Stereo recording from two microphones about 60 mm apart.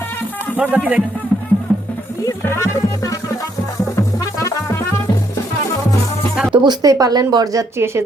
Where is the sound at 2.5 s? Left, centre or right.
Left.